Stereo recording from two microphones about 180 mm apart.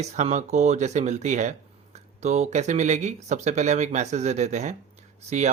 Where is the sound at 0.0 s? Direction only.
40° right (ahead or behind).